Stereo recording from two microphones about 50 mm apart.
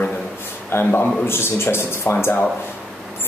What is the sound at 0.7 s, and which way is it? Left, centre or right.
Speech, left.